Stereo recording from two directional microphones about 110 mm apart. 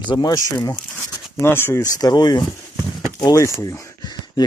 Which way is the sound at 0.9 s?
20° left (ahead or behind).